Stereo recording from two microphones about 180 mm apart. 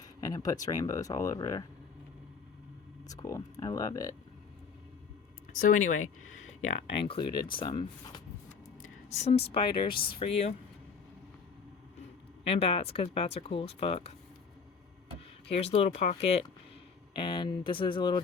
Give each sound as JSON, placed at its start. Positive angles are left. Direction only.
{"t": 0.0, "sound": "speech", "side_deg": 20}
{"t": 3.1, "sound": "speech", "side_deg": 20}
{"t": 5.5, "sound": "speech", "side_deg": 45}
{"t": 9.2, "sound": "speech", "side_deg": 30}
{"t": 9.9, "sound": "speech", "side_deg": 55}
{"t": 10.2, "sound": "speech", "side_deg": 35}
{"t": 12.5, "sound": "speech", "side_deg": 35}
{"t": 15.5, "sound": "speech", "side_deg": 35}